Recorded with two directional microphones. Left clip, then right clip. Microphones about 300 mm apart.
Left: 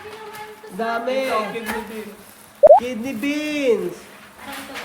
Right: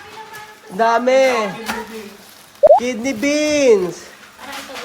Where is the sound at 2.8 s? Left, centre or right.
Centre.